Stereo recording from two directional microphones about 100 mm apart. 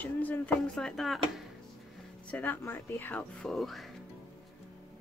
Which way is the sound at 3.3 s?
5° left (ahead or behind).